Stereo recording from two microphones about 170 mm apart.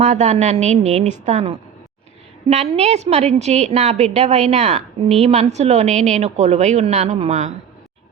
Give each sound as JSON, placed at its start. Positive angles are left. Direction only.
{"t": 0.0, "sound": "a woman's voice", "side_deg": -45}